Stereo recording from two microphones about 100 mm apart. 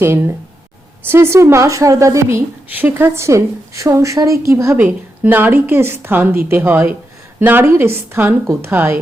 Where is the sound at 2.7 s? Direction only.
20° right (ahead or behind).